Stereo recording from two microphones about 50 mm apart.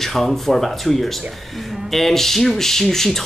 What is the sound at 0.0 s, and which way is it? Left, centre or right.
Speech, centre.